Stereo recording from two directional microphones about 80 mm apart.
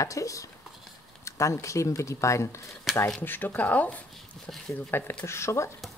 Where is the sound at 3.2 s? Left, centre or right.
Left.